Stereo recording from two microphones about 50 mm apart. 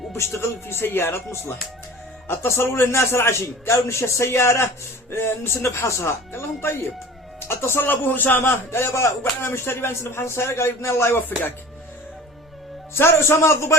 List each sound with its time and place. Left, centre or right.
0.1 s a man's voice: left
8.7 s a man's voice: left
12.9 s a man's voice: left